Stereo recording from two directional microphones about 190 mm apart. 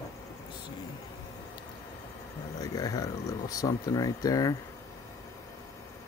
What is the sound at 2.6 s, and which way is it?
Speech, 20° left (ahead or behind).